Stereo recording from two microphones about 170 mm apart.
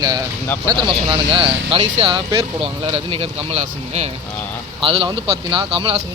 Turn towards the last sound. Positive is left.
turn(degrees=-30)  # may be behind; listen again after turning